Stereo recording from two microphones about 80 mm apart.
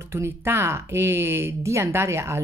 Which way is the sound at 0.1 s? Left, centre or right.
Right.